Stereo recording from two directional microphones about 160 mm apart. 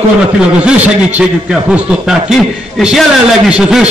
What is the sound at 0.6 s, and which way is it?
A man's voice, 10° right (ahead or behind).